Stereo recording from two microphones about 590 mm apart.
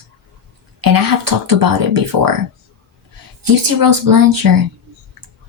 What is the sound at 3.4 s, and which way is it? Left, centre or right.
A woman's voice, right.